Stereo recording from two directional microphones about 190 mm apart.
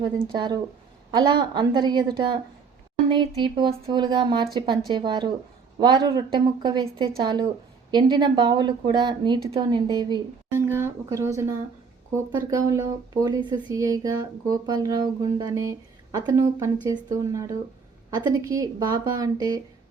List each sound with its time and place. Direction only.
0.0 s a woman's voice: 25° right (ahead or behind)